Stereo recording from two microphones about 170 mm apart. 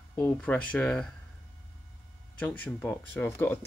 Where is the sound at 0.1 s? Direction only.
10° left (ahead or behind).